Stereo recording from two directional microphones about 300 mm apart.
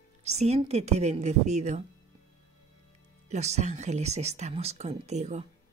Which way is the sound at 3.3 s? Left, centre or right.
Right.